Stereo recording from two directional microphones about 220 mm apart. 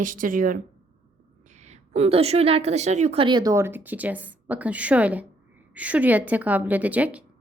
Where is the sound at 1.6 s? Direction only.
30° right (ahead or behind).